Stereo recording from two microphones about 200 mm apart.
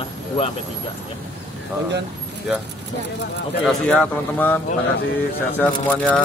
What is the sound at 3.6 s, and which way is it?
Speech, 5° left (ahead or behind).